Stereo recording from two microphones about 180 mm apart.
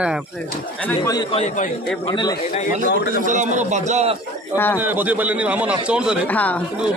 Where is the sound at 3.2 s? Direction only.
40° right (ahead or behind).